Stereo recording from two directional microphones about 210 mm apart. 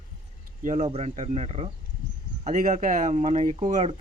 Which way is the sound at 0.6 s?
30° right (ahead or behind).